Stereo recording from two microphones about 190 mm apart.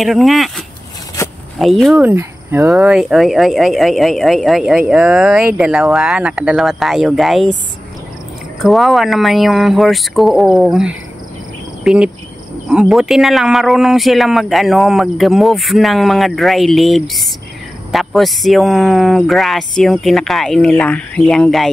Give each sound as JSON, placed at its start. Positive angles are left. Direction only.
{"t": 0.0, "sound": "speech", "side_deg": 0}
{"t": 1.2, "sound": "zipper", "side_deg": 15}
{"t": 1.6, "sound": "speech", "side_deg": 0}
{"t": 2.0, "sound": "speech", "side_deg": -10}
{"t": 2.9, "sound": "speech", "side_deg": -5}
{"t": 8.5, "sound": "speech", "side_deg": 0}
{"t": 11.8, "sound": "cricket", "side_deg": -5}
{"t": 12.6, "sound": "speech", "side_deg": -5}